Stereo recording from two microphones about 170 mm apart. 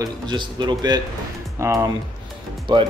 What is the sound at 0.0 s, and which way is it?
Speech, 25° right (ahead or behind).